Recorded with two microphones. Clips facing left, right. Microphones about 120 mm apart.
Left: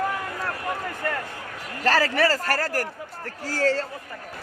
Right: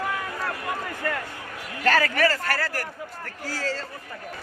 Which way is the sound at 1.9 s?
30° left (ahead or behind).